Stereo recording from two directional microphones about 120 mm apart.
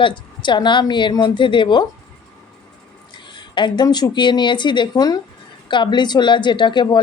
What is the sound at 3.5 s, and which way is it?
Speech, 40° left (ahead or behind).